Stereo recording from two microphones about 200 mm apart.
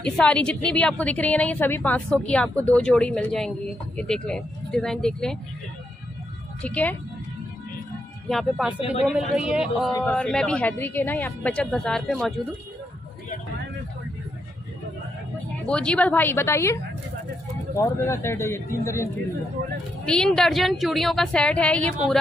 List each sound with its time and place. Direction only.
0.2 s speech: 5° left (ahead or behind)
6.6 s speech: 5° left (ahead or behind)
8.3 s speech: centre (ahead or behind)
8.7 s speech: 30° left (ahead or behind)
9.0 s speech: 5° right (ahead or behind)
15.6 s speech: 5° left (ahead or behind)
20.1 s speech: 5° left (ahead or behind)